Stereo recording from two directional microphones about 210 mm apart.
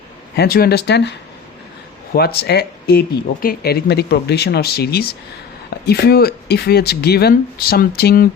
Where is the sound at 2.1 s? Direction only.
50° left (ahead or behind).